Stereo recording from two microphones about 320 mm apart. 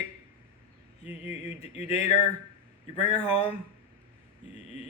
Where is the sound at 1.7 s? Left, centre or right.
Centre.